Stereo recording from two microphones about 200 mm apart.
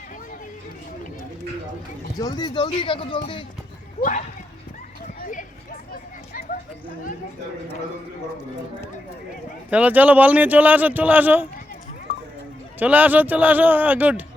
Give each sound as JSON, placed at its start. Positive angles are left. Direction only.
{"t": 2.1, "sound": "speech", "side_deg": 20}
{"t": 9.6, "sound": "a man's voice", "side_deg": -5}
{"t": 12.8, "sound": "a man's voice", "side_deg": -10}